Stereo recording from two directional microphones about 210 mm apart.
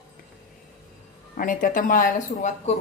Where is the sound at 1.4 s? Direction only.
40° left (ahead or behind).